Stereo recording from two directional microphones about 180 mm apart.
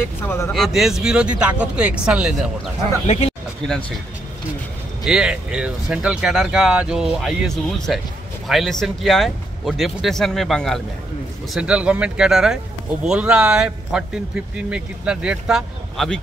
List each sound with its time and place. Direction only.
0.2 s speech: 15° left (ahead or behind)
0.5 s speech: centre (ahead or behind)
3.1 s speech: 35° left (ahead or behind)
5.0 s speech: 5° right (ahead or behind)